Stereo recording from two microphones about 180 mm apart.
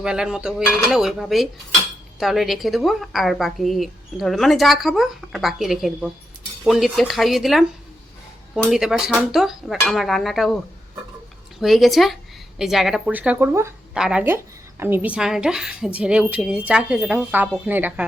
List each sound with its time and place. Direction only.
0.0 s a woman's voice: 5° right (ahead or behind)
11.6 s a woman's voice: centre (ahead or behind)